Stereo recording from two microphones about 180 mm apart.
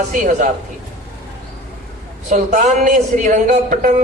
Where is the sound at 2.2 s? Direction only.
40° right (ahead or behind).